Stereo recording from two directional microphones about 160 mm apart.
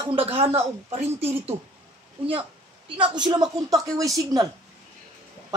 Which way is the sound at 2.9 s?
30° right (ahead or behind).